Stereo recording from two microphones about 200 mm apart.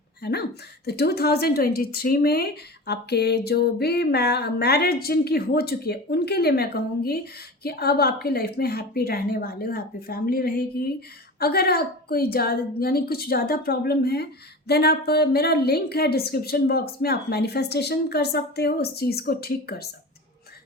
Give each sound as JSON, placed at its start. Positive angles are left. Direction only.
{"t": 0.2, "sound": "a woman's voice", "side_deg": 55}